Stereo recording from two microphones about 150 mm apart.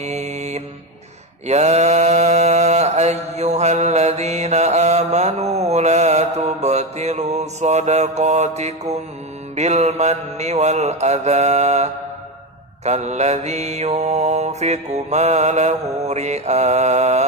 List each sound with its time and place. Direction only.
0.0 s mantra: 50° right (ahead or behind)